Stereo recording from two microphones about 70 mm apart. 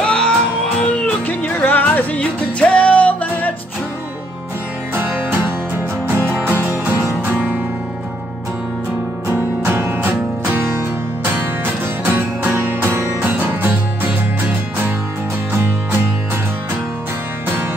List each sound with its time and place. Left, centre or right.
0.0 s music: centre
4.9 s music: right
7.3 s music: centre
9.7 s music: right
12.0 s music: right